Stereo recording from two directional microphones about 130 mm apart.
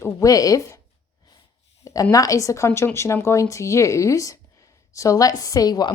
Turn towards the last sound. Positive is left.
turn(degrees=30)  # may be behind; listen again after turning